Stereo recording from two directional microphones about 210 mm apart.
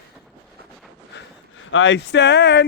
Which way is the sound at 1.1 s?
55° left (ahead or behind).